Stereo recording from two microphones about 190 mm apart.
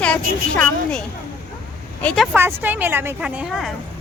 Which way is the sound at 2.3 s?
10° right (ahead or behind).